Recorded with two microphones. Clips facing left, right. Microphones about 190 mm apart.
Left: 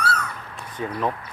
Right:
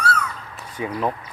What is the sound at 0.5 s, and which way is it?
Crow, 10° right (ahead or behind).